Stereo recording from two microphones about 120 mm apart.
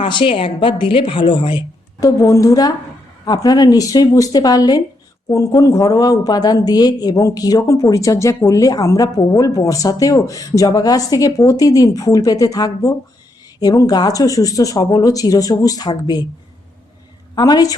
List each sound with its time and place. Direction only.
0.0 s a woman's voice: 45° left (ahead or behind)
17.3 s speech: 30° left (ahead or behind)